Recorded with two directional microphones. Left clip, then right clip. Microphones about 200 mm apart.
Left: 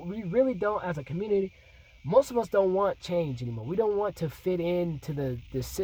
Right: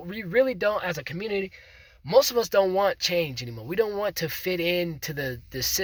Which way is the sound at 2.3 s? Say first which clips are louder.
Right 3 dB; 20° right (ahead or behind).